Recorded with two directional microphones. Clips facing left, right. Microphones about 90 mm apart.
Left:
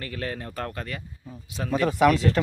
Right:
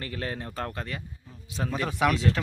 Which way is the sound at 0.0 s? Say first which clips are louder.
Left 1 dB; 25° right (ahead or behind).